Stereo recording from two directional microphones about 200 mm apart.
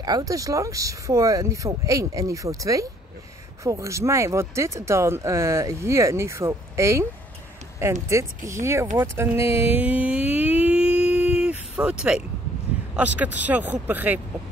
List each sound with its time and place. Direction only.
0.0 s speech: 20° right (ahead or behind)
8.9 s a sound: 10° right (ahead or behind)
12.9 s speech: 5° right (ahead or behind)